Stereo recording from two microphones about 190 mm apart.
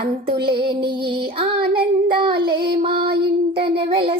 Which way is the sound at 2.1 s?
25° right (ahead or behind).